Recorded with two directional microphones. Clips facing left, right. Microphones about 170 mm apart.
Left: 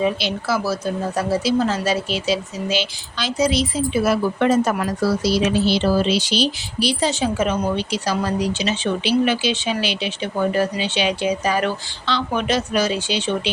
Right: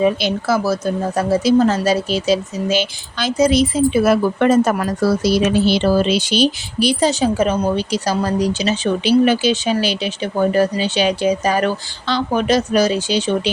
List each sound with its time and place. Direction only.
0.0 s speech: 50° right (ahead or behind)